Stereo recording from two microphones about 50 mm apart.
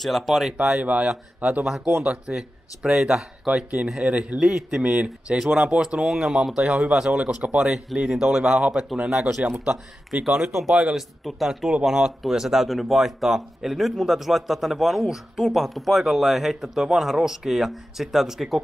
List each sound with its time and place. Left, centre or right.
0.0 s speech: centre
0.7 s speech: right
2.0 s speech: centre
4.0 s speech: right
4.4 s speech: centre
4.8 s speech: right
7.6 s speech: centre
8.9 s speech: centre
11.0 s speech: centre